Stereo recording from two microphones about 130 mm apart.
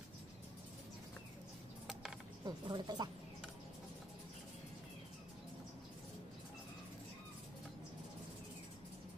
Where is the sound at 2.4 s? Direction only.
35° right (ahead or behind).